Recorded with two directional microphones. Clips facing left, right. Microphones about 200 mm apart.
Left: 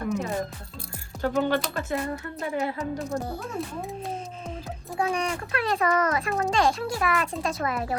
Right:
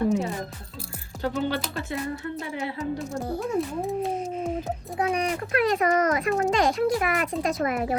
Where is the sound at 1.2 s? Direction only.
45° left (ahead or behind).